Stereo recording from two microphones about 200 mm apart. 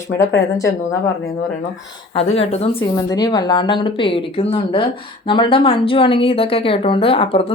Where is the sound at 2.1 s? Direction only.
30° left (ahead or behind).